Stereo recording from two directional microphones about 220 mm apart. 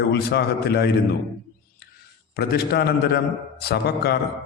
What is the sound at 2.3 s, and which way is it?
A man's voice, 45° left (ahead or behind).